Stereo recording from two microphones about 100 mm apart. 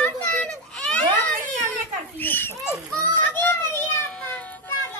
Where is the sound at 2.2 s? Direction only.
20° left (ahead or behind).